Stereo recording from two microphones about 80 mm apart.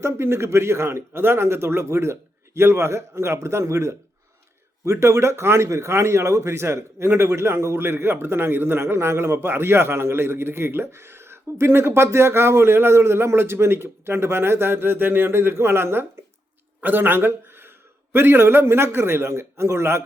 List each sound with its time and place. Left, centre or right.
0.0 s a man's voice: right